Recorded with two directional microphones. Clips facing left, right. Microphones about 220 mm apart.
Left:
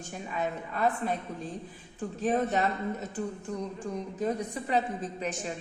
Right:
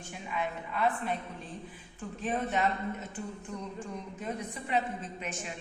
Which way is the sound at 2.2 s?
40° left (ahead or behind).